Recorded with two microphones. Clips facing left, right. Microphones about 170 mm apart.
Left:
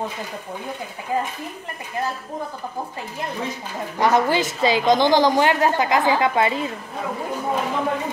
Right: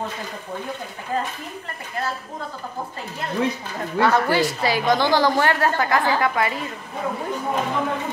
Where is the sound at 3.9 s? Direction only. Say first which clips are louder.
Even; 15° left (ahead or behind).